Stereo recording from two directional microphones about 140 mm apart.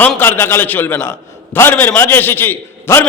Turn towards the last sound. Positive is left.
turn(degrees=15)  # may be behind; listen again after turning